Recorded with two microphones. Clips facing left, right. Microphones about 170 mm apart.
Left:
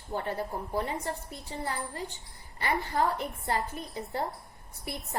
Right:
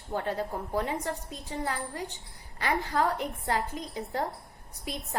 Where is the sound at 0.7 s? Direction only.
75° right (ahead or behind).